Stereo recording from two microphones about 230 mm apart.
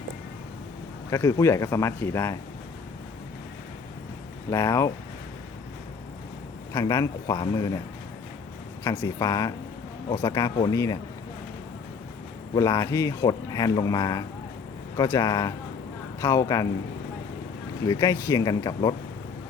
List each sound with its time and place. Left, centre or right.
1.1 s speech: centre
4.5 s speech: centre
6.7 s speech: centre
9.0 s speech: centre
12.5 s speech: centre
17.8 s speech: centre